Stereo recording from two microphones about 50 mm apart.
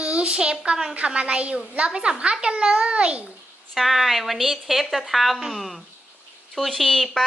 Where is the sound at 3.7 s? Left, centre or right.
Centre.